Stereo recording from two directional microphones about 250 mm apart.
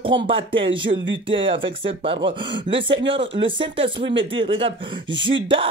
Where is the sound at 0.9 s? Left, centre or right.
Right.